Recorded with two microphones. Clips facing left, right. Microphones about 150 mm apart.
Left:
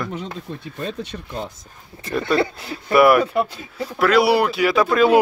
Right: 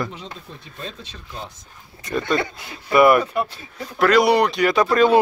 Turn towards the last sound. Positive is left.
turn(degrees=5)  # may be behind; listen again after turning